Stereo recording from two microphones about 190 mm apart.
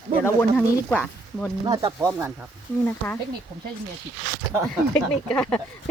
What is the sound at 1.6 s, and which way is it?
Speech, 25° right (ahead or behind).